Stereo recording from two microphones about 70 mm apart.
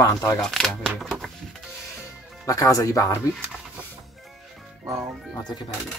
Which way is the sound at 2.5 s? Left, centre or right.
Left.